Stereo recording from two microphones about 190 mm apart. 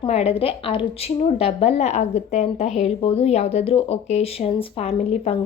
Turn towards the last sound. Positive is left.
turn(degrees=30)  # may be behind; listen again after turning